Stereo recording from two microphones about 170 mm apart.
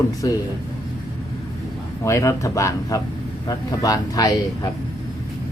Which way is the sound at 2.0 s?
20° left (ahead or behind).